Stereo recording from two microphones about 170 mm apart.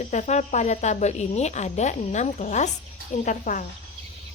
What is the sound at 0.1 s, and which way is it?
A woman's voice, 45° left (ahead or behind).